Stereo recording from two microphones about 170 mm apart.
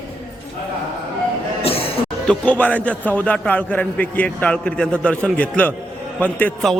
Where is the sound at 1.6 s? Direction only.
35° left (ahead or behind).